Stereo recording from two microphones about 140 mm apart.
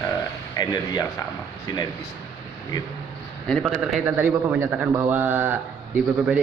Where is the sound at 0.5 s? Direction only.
25° left (ahead or behind).